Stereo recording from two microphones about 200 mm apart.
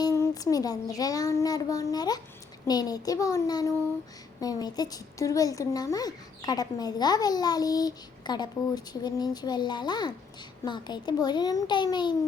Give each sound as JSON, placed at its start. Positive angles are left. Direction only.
{"t": 0.0, "sound": "a child's voice", "side_deg": 15}